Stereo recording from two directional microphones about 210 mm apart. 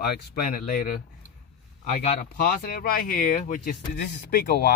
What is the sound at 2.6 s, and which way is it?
Speech, 45° left (ahead or behind).